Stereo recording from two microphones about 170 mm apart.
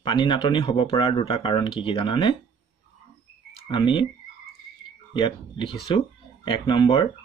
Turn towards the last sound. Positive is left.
turn(degrees=30)  # may be behind; listen again after turning